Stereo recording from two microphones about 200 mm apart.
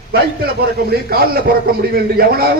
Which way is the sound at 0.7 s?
50° right (ahead or behind).